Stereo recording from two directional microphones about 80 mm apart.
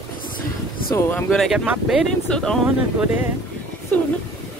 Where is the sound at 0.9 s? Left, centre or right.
Left.